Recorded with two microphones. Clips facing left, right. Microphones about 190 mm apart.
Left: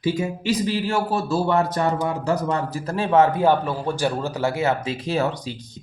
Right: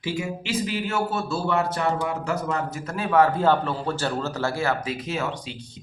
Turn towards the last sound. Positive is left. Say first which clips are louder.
# left 6 dB
turn(degrees=40)  # may be behind; listen again after turning